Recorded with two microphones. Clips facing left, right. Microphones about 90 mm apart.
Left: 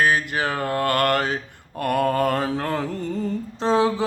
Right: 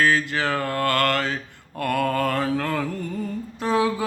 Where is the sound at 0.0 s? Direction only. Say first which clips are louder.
Even; 20° left (ahead or behind).